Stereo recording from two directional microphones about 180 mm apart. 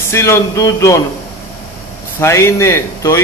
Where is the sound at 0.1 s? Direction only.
15° left (ahead or behind).